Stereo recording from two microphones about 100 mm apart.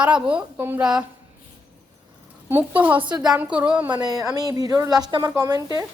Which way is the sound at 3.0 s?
50° right (ahead or behind).